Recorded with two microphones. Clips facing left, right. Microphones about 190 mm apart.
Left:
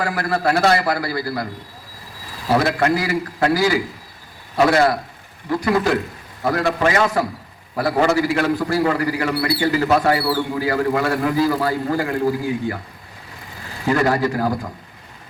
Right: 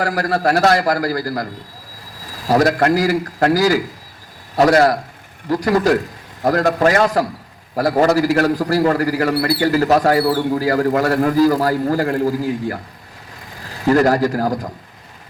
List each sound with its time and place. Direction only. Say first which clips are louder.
0.0 s a man's voice: right 3 dB; 40° right (ahead or behind)
2.5 s a man's voice: right 3 dB; 40° right (ahead or behind)
13.9 s a man's voice: right 4 dB; 40° right (ahead or behind)